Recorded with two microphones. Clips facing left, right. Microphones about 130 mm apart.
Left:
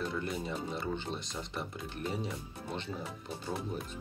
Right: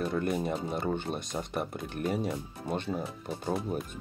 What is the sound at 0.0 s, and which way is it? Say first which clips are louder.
Speech: right 6 dB; 55° right (ahead or behind).